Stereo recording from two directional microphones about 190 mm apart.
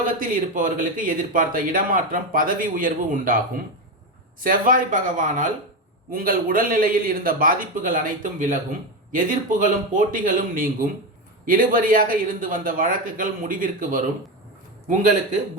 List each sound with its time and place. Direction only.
0.0 s speech: 45° right (ahead or behind)